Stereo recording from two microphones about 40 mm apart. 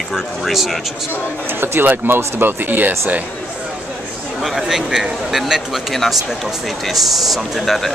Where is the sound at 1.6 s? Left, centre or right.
Right.